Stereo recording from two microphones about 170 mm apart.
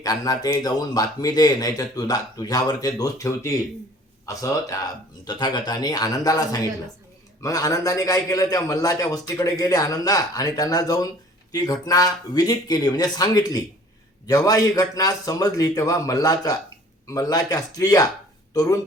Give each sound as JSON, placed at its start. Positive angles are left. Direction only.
{"t": 0.0, "sound": "a man's voice", "side_deg": 20}